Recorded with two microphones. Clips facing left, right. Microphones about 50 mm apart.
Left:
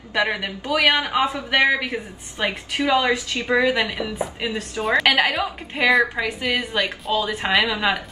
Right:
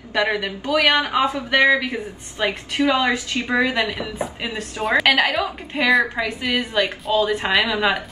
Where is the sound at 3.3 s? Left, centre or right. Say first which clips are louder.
Left 1 dB; right.